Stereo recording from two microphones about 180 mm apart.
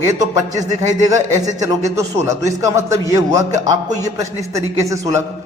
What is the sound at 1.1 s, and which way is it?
A man's voice, 20° right (ahead or behind).